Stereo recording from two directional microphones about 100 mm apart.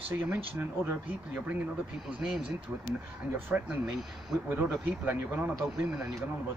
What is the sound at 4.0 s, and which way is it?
Speech, centre (ahead or behind).